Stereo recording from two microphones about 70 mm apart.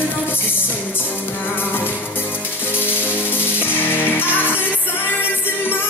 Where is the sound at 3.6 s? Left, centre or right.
Left.